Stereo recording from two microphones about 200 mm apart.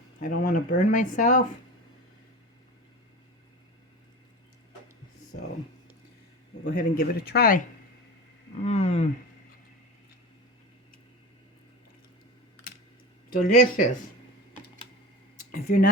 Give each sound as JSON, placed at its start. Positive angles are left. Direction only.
{"t": 0.2, "sound": "speech", "side_deg": 40}
{"t": 6.7, "sound": "speech", "side_deg": 45}
{"t": 8.6, "sound": "speech", "side_deg": 30}
{"t": 13.3, "sound": "speech", "side_deg": 45}
{"t": 15.7, "sound": "speech", "side_deg": 45}